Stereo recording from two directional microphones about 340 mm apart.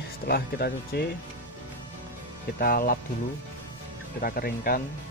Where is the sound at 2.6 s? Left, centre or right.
Left.